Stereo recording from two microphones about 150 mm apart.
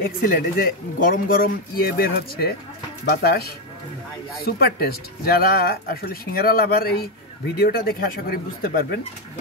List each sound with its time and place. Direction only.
0.0 s speech: 75° left (ahead or behind)